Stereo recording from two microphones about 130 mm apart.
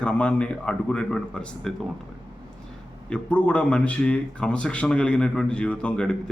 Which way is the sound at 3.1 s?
10° left (ahead or behind).